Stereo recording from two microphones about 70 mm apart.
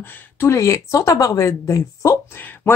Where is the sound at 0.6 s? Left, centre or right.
Left.